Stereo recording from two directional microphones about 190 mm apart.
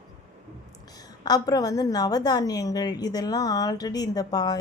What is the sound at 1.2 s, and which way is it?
A woman's voice, 20° left (ahead or behind).